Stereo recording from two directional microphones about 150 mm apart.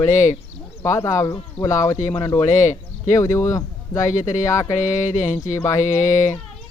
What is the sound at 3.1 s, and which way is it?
Speech, 20° left (ahead or behind).